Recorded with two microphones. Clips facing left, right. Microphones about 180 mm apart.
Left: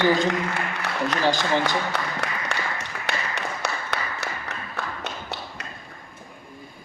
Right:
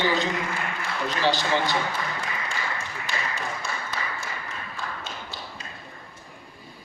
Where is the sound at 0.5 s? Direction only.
70° left (ahead or behind).